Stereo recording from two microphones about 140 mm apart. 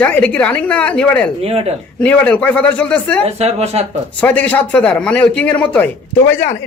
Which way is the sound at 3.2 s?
50° right (ahead or behind).